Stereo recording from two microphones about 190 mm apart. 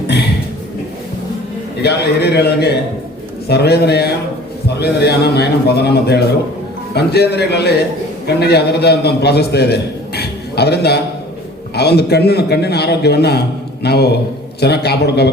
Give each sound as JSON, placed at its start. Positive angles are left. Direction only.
{"t": 1.8, "sound": "a man's voice", "side_deg": 60}